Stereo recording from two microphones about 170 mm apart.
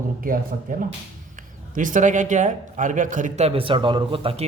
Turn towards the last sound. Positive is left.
turn(degrees=-30)  # may be behind; listen again after turning